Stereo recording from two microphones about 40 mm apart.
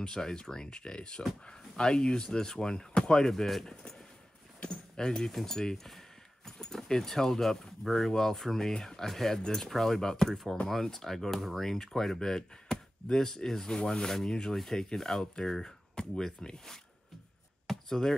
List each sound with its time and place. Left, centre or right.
0.0 s speech: centre
3.3 s speech: centre
4.6 s a sound: centre
5.3 s speech: centre
10.3 s speech: centre
17.6 s chop: centre